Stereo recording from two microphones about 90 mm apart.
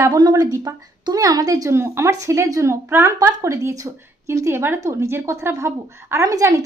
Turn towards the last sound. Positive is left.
turn(degrees=-40)  # may be behind; listen again after turning